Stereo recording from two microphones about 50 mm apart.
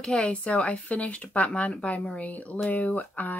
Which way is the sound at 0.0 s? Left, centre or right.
Centre.